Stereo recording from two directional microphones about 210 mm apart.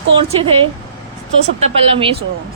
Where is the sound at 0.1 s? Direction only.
25° right (ahead or behind).